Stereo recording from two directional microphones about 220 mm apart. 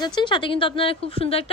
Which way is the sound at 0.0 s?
20° left (ahead or behind).